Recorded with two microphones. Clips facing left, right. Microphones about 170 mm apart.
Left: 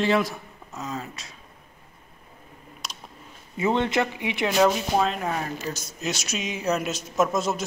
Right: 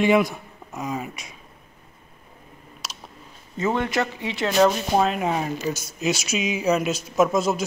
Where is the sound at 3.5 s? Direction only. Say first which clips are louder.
Even; 20° left (ahead or behind).